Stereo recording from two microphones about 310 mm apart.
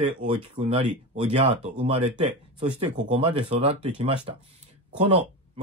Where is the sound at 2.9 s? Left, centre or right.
Centre.